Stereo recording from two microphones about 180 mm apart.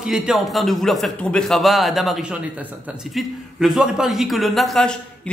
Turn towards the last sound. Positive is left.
turn(degrees=0)  # may be behind; listen again after turning